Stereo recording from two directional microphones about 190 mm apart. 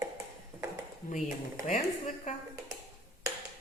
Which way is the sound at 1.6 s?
40° left (ahead or behind).